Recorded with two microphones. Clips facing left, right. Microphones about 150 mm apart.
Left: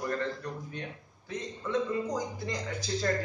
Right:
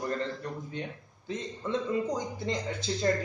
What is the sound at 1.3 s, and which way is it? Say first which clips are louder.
A man's voice: even; 25° right (ahead or behind).